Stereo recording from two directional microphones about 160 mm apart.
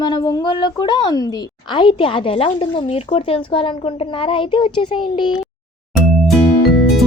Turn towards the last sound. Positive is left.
turn(degrees=0)  # may be behind; listen again after turning